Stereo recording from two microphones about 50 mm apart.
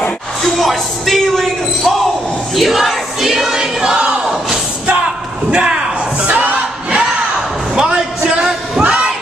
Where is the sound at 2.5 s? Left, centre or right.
Centre.